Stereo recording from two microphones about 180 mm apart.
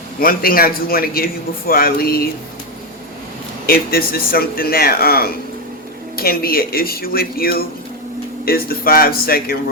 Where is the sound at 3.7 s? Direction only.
55° left (ahead or behind).